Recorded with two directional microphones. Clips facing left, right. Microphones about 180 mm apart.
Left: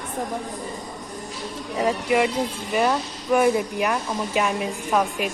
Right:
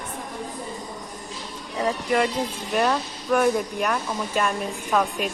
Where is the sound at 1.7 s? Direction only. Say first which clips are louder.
Left 2 dB; 10° left (ahead or behind).